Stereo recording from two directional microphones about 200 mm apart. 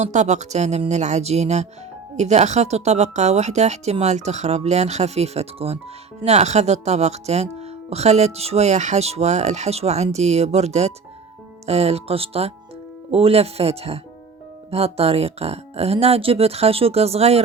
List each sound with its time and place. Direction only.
0.0 s speech: 35° right (ahead or behind)